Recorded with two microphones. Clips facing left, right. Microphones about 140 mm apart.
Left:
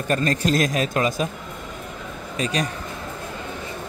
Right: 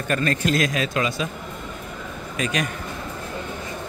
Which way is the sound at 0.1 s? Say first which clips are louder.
Left 1 dB; 35° left (ahead or behind).